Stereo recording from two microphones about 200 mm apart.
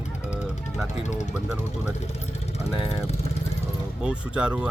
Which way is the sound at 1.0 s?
35° left (ahead or behind).